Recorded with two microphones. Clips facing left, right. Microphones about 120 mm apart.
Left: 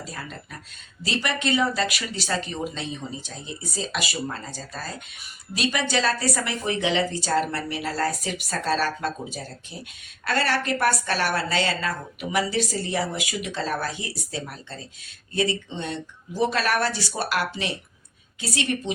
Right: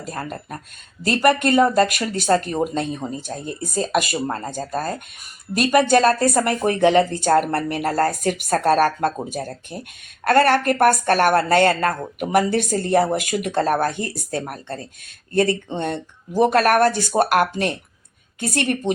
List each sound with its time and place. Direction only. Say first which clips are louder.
0.0 s a woman's voice: right 7 dB; 50° right (ahead or behind)